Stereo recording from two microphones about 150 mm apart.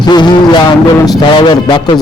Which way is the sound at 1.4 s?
30° left (ahead or behind).